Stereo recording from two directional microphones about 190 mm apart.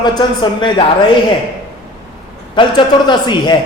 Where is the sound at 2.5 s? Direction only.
25° left (ahead or behind).